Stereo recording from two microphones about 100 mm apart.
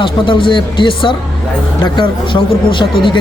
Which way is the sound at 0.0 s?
55° left (ahead or behind).